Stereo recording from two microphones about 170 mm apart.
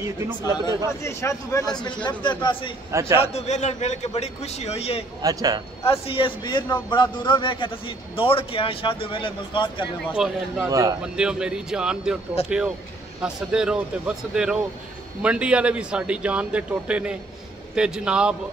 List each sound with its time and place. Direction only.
0.8 s a man's voice: 15° left (ahead or behind)
2.9 s a man's voice: 15° right (ahead or behind)
3.3 s a man's voice: 40° left (ahead or behind)
5.2 s a man's voice: 20° right (ahead or behind)
5.9 s a man's voice: 30° left (ahead or behind)
10.1 s speech: 5° right (ahead or behind)
10.7 s a man's voice: 20° right (ahead or behind)
11.1 s a man's voice: 5° right (ahead or behind)